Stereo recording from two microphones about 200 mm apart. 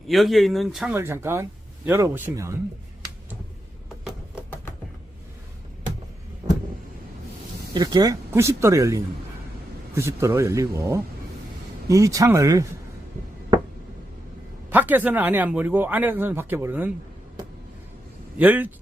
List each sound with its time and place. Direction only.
0.1 s speech: centre (ahead or behind)
0.9 s speech: 10° right (ahead or behind)
7.7 s speech: 20° right (ahead or behind)
14.7 s speech: 10° right (ahead or behind)
18.3 s speech: 10° right (ahead or behind)